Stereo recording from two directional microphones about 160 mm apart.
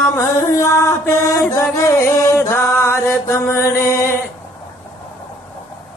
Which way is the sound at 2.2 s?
20° left (ahead or behind).